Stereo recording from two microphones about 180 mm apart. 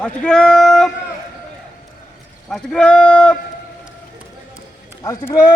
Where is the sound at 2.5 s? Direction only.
5° left (ahead or behind).